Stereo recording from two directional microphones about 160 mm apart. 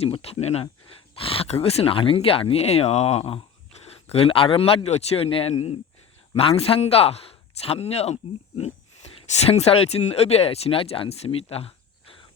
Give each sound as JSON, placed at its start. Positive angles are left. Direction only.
{"t": 0.0, "sound": "a man's voice", "side_deg": 40}